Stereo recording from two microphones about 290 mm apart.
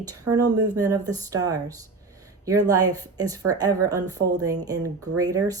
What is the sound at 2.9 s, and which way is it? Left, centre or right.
Speech, centre.